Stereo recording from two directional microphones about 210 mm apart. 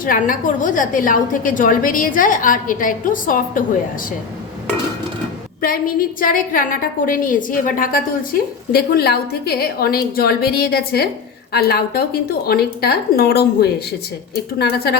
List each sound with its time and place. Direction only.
0.0 s a woman's voice: 40° left (ahead or behind)
5.6 s a woman's voice: 40° left (ahead or behind)